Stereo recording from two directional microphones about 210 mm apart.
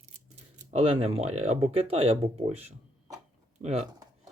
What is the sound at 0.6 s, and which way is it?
Speech, 30° right (ahead or behind).